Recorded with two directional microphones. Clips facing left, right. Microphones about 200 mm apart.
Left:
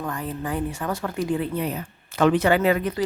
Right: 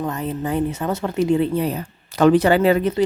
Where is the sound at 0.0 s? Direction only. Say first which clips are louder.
Right 5 dB; 25° right (ahead or behind).